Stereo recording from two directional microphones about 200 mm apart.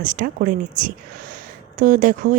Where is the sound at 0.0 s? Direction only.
40° right (ahead or behind).